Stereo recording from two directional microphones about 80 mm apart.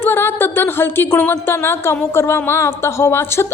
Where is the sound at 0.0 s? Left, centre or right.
Left.